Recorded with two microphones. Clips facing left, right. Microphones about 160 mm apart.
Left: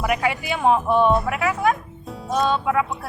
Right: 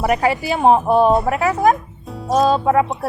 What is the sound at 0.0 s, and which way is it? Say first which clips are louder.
Speech: right 5 dB; 40° right (ahead or behind).